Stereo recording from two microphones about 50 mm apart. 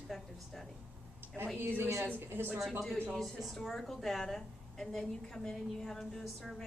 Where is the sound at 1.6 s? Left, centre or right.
Right.